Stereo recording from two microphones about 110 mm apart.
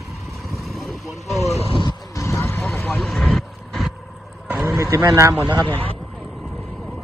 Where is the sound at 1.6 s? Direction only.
60° left (ahead or behind).